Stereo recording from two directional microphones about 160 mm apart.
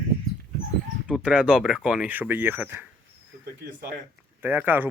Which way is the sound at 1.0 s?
5° right (ahead or behind).